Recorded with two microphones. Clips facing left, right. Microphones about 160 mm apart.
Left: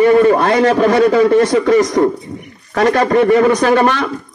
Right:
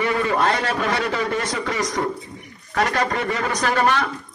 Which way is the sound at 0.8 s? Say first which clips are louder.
Left 13 dB; 40° left (ahead or behind).